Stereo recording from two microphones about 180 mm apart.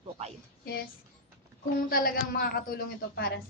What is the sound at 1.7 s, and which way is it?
A woman's voice, 55° left (ahead or behind).